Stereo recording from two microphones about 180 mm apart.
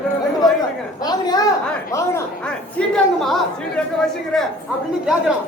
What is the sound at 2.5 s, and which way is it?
Chatter, 5° left (ahead or behind).